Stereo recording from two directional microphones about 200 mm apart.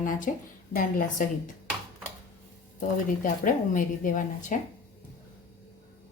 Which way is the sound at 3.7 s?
40° left (ahead or behind).